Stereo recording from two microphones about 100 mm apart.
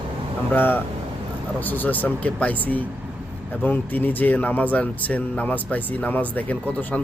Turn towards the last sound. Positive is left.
turn(degrees=15)  # may be behind; listen again after turning